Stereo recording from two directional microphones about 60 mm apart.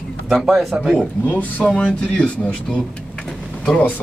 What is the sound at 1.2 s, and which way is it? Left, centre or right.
Speech, left.